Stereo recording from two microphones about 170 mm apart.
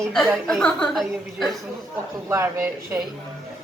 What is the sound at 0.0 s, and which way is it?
A woman's voice, centre (ahead or behind).